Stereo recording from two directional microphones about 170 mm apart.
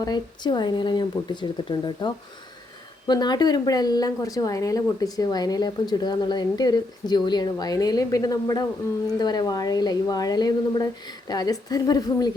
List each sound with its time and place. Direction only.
0.0 s speech: 25° left (ahead or behind)